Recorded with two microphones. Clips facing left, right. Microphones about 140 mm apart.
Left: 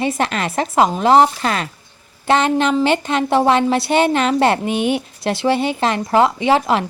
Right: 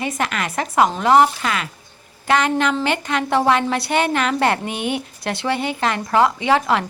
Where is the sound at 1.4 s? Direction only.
35° left (ahead or behind).